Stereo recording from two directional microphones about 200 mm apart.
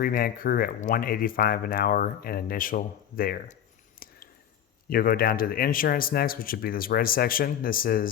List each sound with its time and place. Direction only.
0.0 s speech: 45° left (ahead or behind)
4.0 s a sound: 45° left (ahead or behind)
4.9 s speech: 45° left (ahead or behind)